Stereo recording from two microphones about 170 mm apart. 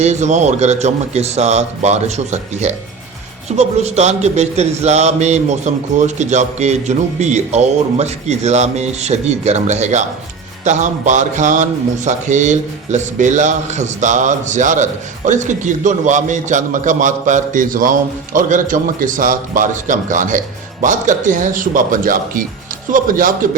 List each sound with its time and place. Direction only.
0.0 s a man's voice: 40° right (ahead or behind)